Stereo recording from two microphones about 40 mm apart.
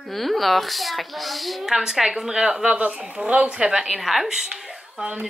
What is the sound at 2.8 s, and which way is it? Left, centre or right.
Speech, right.